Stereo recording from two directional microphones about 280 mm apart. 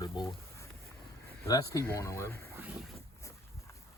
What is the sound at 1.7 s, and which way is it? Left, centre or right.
Speech, centre.